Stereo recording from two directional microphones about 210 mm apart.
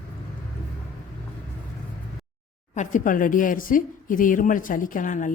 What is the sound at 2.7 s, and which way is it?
Speech, 35° left (ahead or behind).